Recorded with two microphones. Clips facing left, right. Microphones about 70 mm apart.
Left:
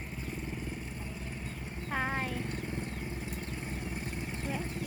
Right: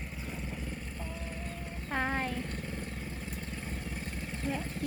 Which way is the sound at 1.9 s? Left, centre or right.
Centre.